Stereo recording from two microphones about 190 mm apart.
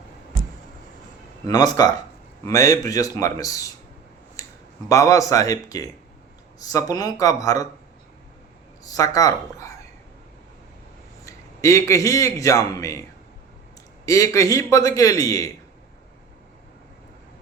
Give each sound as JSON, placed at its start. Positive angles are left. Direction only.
{"t": 1.5, "sound": "a man's voice", "side_deg": 20}
{"t": 4.4, "sound": "a sound", "side_deg": 15}
{"t": 4.9, "sound": "a man's voice", "side_deg": 15}
{"t": 8.8, "sound": "a man's voice", "side_deg": 20}
{"t": 11.3, "sound": "a man's voice", "side_deg": 15}